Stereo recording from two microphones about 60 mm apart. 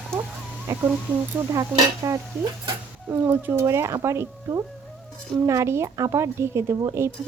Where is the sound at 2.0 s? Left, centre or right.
Right.